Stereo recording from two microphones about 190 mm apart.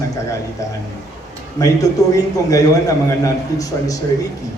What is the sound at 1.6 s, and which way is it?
A man's voice, 20° left (ahead or behind).